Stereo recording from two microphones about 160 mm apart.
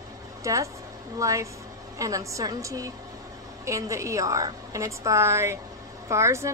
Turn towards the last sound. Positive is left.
turn(degrees=-20)  # may be behind; listen again after turning